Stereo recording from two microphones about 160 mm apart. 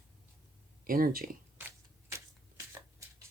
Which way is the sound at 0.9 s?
65° right (ahead or behind).